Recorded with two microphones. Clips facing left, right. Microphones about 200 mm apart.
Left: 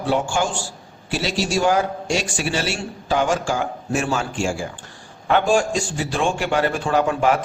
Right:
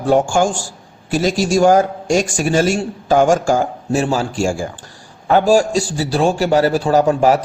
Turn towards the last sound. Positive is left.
turn(degrees=-40)  # may be behind; listen again after turning